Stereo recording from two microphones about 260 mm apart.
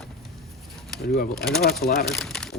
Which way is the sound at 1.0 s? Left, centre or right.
Left.